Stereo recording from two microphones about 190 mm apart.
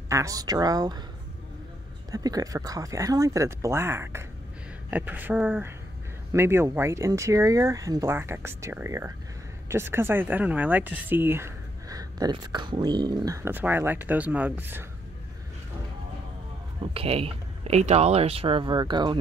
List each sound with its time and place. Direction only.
0.1 s speech: 15° right (ahead or behind)
2.0 s speech: 20° right (ahead or behind)
16.8 s speech: 30° right (ahead or behind)